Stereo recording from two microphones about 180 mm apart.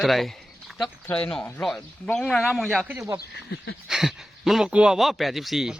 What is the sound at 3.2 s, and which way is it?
Speech, 65° left (ahead or behind).